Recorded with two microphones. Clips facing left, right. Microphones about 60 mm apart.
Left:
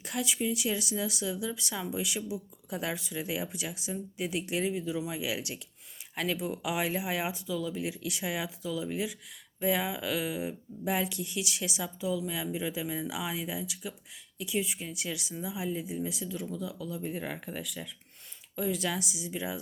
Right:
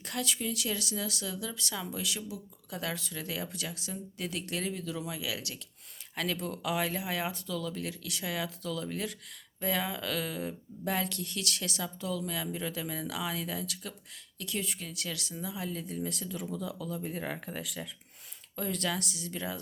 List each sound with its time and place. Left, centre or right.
0.0 s speech: centre
18.5 s speech: centre